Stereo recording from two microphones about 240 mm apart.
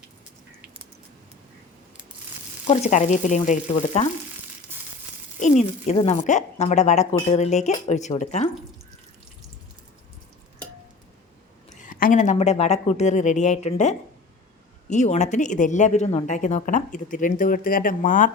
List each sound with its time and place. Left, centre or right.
2.6 s speech: left
4.7 s crumpling: centre
5.4 s speech: left
11.7 s speech: left